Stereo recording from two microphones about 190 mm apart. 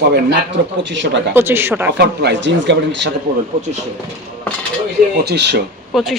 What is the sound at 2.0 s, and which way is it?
Speech, 65° right (ahead or behind).